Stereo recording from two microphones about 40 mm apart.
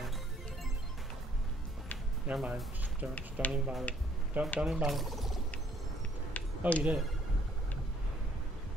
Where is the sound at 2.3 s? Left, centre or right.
Right.